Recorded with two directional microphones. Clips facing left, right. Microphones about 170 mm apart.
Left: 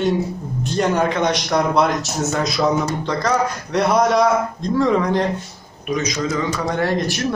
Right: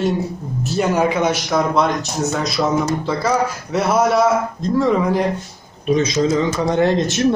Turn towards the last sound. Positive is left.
turn(degrees=-20)  # may be behind; listen again after turning